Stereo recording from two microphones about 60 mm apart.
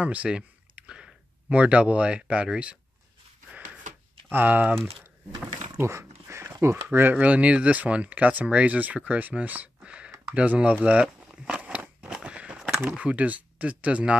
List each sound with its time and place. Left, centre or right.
0.0 s speech: right
4.3 s speech: right
5.8 s speech: right
7.2 s speech: right
11.6 s a sound: right
12.9 s speech: right